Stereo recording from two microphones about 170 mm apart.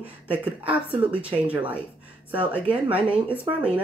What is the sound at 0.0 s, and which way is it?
Speech, 10° right (ahead or behind).